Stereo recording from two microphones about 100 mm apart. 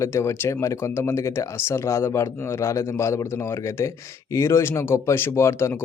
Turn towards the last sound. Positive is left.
turn(degrees=30)  # may be behind; listen again after turning